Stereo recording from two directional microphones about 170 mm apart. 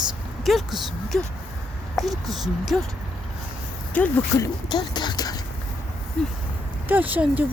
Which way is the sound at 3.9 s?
15° left (ahead or behind).